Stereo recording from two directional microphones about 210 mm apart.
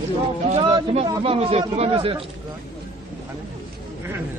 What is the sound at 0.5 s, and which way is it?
A man's voice, 25° right (ahead or behind).